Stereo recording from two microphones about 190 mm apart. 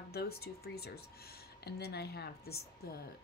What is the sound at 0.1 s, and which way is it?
Speech, 55° left (ahead or behind).